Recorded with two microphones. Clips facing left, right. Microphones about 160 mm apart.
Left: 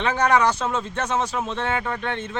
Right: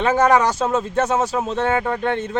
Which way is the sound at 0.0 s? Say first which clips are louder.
Right 4 dB; 45° right (ahead or behind).